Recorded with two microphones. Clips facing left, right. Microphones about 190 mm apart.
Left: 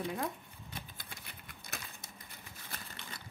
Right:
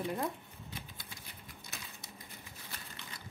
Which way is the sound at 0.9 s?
60° left (ahead or behind).